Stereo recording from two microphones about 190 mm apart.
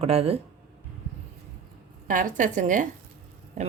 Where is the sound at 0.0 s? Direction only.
30° right (ahead or behind).